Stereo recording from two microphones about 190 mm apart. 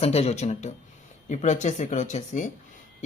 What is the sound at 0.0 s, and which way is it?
Speech, 35° left (ahead or behind).